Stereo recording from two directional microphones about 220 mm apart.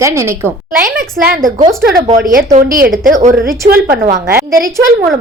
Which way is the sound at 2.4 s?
35° right (ahead or behind).